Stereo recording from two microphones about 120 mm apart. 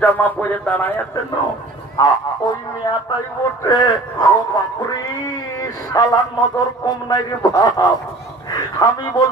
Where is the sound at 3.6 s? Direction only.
30° left (ahead or behind).